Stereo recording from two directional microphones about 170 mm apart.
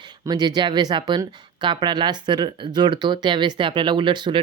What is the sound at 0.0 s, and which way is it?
Speech, 25° right (ahead or behind).